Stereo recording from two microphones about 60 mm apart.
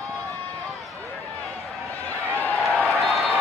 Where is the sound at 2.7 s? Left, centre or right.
Centre.